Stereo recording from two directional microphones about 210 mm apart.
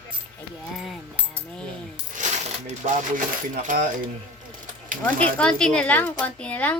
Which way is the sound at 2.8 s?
40° right (ahead or behind).